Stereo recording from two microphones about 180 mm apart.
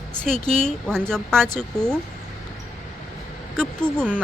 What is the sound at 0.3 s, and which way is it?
Speech, 45° left (ahead or behind).